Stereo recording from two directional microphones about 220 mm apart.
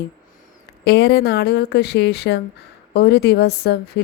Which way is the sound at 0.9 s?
50° left (ahead or behind).